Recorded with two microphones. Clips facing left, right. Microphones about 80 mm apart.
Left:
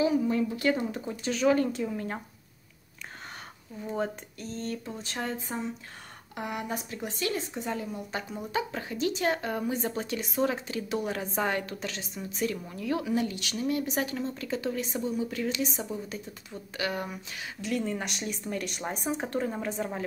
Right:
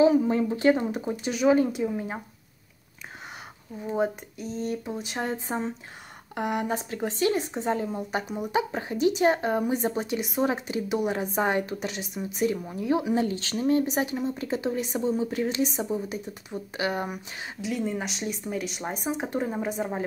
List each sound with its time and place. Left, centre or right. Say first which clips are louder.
0.0 s speech: right 5 dB; right; by 2.2 s centre
3.8 s speech: right 5 dB; centre
5.2 s speech: right 3 dB; right
13.8 s speech: right 4 dB; right
17.6 s speech: right 2 dB; centre